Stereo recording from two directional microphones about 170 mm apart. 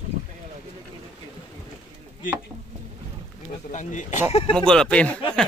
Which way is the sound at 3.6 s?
45° left (ahead or behind).